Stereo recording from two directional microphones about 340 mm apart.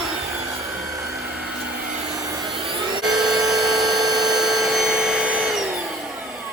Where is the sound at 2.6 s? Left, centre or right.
Centre.